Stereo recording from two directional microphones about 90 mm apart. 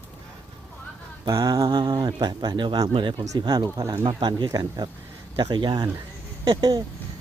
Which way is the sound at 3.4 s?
50° right (ahead or behind).